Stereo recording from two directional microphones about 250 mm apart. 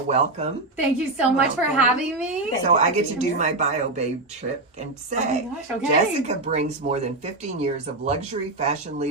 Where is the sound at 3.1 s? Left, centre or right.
Right.